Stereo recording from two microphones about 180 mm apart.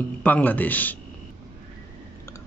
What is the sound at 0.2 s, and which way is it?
Speech, 10° left (ahead or behind).